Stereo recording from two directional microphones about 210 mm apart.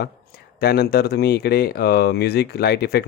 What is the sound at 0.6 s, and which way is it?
Speech, 50° left (ahead or behind).